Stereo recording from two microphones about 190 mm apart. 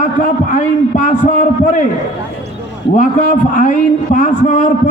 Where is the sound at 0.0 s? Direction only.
45° left (ahead or behind).